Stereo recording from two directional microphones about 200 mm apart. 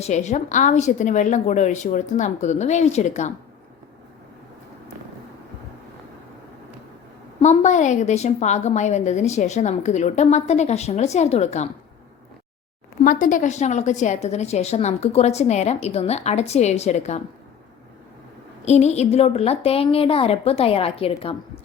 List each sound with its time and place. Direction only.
0.0 s a woman's voice: 35° left (ahead or behind)
7.3 s a woman's voice: 35° left (ahead or behind)
13.1 s a woman's voice: 40° left (ahead or behind)
18.6 s a woman's voice: 35° left (ahead or behind)